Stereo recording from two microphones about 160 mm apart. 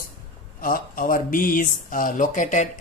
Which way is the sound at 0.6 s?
60° left (ahead or behind).